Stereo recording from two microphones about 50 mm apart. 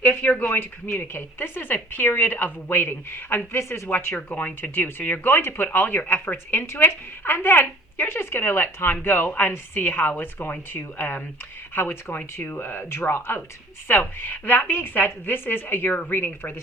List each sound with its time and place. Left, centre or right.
0.0 s speech: left
0.9 s a woman's voice: left
3.6 s speech: left
3.8 s a woman's voice: left